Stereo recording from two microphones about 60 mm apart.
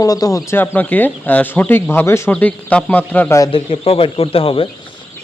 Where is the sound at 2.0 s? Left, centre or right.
Left.